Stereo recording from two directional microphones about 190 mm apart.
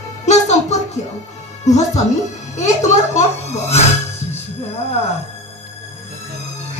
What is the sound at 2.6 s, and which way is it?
A child's voice, 35° left (ahead or behind).